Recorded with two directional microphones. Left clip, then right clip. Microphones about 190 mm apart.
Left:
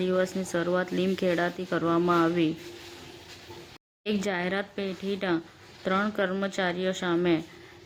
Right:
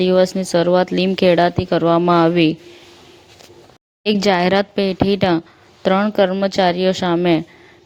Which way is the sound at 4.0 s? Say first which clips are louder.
Right 14 dB; 35° right (ahead or behind).